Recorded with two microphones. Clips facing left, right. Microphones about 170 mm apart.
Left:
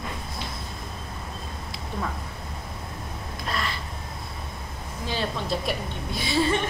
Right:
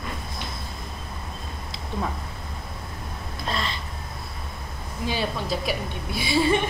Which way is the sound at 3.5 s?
25° right (ahead or behind).